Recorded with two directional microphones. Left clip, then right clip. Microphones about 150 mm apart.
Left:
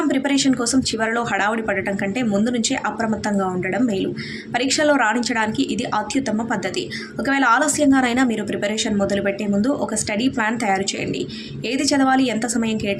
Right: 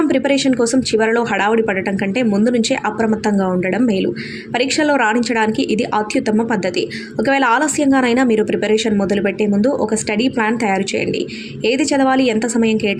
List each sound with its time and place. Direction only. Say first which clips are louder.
0.1 s a woman's voice: right 4 dB; 25° right (ahead or behind)